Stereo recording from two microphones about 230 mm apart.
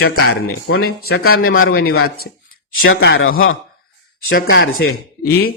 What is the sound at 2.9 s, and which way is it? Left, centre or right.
Speech, left.